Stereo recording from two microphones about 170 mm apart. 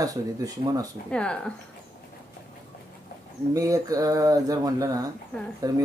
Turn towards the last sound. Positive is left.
turn(degrees=-20)  # may be behind; listen again after turning